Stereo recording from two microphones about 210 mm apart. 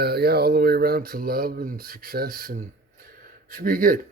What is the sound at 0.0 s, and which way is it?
Speech, 50° right (ahead or behind).